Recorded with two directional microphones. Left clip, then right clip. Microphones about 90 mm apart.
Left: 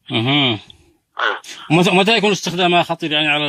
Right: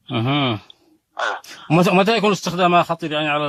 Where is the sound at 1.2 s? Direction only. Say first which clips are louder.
Left 4 dB; 35° left (ahead or behind).